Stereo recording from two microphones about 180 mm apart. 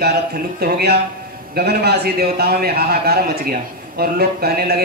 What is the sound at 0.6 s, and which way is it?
Speech, 60° right (ahead or behind).